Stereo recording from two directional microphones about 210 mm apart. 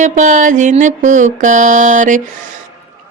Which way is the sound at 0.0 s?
35° right (ahead or behind).